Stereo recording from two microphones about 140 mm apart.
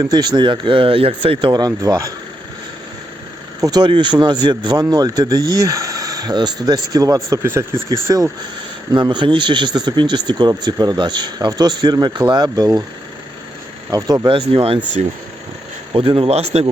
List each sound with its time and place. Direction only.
0.0 s speech: 30° right (ahead or behind)
3.6 s speech: 30° right (ahead or behind)
8.9 s speech: 35° right (ahead or behind)
13.9 s speech: 25° right (ahead or behind)
14.3 s speech: 40° right (ahead or behind)
15.9 s speech: 40° right (ahead or behind)